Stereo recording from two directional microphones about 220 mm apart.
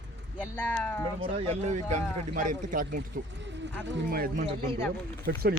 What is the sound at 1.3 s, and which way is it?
Speech, 30° right (ahead or behind).